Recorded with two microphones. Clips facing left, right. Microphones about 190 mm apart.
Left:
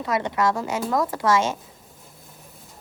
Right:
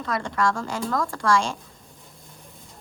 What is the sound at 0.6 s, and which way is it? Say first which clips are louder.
Speech: left 2 dB; 5° left (ahead or behind).